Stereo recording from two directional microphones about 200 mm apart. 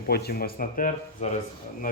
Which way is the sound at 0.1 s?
50° left (ahead or behind).